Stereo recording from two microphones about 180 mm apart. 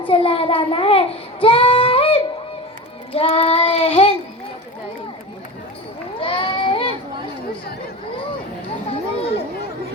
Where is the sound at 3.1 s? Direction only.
35° left (ahead or behind).